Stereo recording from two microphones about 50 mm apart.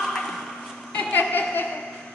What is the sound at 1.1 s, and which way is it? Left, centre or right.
Chuckle, left.